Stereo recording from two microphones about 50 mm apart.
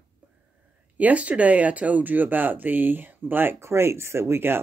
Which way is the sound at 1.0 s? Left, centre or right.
Right.